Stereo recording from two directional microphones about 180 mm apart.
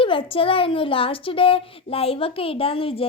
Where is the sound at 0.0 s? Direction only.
30° left (ahead or behind).